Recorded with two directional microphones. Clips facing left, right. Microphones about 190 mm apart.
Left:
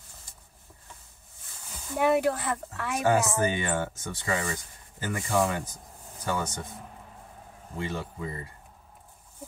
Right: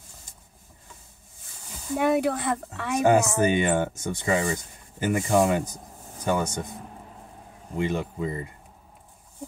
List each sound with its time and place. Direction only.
2.0 s speech: centre (ahead or behind)
3.1 s speech: 15° right (ahead or behind)
7.8 s speech: 15° right (ahead or behind)